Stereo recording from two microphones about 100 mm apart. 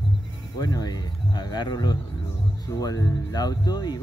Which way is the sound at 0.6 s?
40° left (ahead or behind).